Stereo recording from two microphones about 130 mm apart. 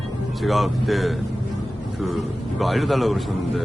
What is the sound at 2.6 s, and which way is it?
A man's voice, centre (ahead or behind).